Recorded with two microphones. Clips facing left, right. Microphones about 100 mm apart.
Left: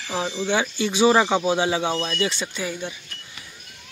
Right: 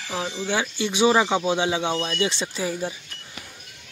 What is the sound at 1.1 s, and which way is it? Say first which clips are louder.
Speech: left 1 dB; centre (ahead or behind).